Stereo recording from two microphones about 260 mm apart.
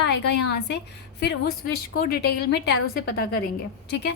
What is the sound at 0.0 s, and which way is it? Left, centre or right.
A woman's voice, left.